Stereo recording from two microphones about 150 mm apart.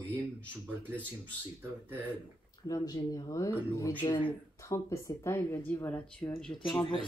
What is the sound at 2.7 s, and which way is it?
Speech, 25° left (ahead or behind).